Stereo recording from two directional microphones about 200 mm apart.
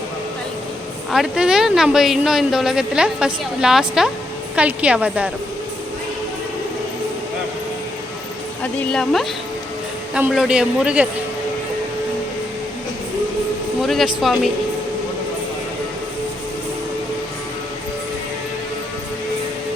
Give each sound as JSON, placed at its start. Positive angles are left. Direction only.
{"t": 1.1, "sound": "a woman's voice", "side_deg": -5}
{"t": 8.6, "sound": "a woman's voice", "side_deg": 5}
{"t": 13.8, "sound": "a woman's voice", "side_deg": 0}